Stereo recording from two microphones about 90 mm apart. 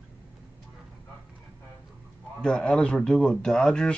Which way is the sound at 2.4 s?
10° left (ahead or behind).